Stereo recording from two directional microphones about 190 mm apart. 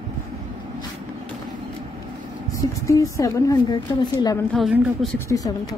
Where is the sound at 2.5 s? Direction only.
15° left (ahead or behind).